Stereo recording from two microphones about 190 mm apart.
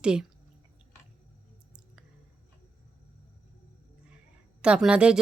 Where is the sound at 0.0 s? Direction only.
5° right (ahead or behind).